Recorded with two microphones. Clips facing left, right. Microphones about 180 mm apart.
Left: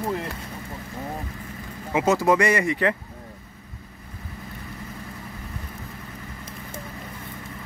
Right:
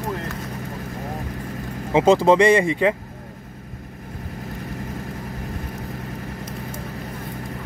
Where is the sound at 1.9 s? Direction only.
25° right (ahead or behind).